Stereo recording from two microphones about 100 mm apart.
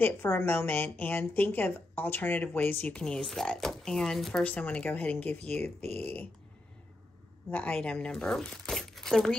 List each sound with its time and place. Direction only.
0.0 s speech: 25° left (ahead or behind)
7.5 s speech: 15° left (ahead or behind)